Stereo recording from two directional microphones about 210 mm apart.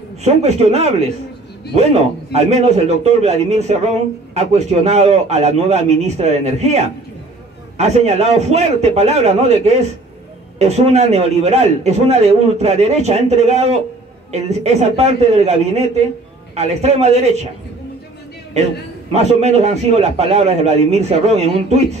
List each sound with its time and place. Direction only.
0.2 s a man's voice: 30° right (ahead or behind)
19.1 s a man's voice: 30° right (ahead or behind)